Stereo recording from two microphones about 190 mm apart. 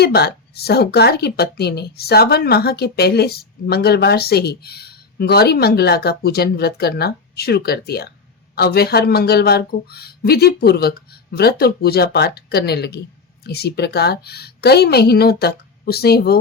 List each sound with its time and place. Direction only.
0.0 s speech: 60° left (ahead or behind)